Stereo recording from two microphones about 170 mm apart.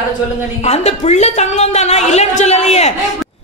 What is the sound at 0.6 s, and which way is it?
A woman's voice, 40° left (ahead or behind).